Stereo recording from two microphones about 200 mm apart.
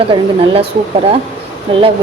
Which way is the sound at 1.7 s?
25° right (ahead or behind).